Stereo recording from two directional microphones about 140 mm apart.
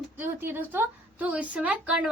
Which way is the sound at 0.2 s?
15° right (ahead or behind).